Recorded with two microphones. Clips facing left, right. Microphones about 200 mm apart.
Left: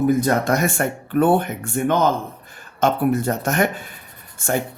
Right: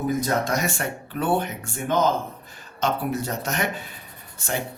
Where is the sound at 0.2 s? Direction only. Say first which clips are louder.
Left 5 dB; 55° left (ahead or behind).